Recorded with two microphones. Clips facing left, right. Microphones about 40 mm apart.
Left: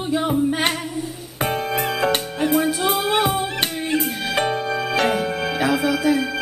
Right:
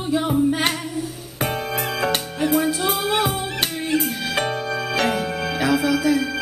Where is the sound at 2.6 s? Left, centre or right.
Centre.